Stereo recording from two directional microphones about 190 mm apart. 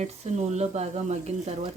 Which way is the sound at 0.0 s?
35° right (ahead or behind).